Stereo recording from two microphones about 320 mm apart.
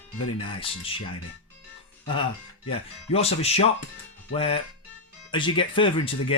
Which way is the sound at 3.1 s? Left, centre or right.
Centre.